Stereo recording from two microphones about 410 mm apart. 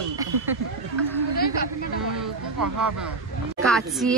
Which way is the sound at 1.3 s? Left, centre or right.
Left.